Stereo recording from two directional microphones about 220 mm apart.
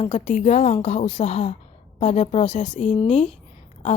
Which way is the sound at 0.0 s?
30° left (ahead or behind).